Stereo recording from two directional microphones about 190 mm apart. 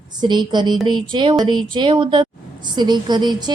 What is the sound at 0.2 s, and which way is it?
Speech, 25° right (ahead or behind).